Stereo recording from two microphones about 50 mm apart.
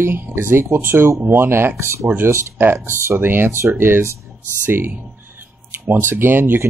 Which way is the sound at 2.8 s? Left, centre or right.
Right.